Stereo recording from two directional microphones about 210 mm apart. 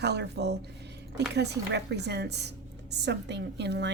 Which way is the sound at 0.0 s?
55° right (ahead or behind).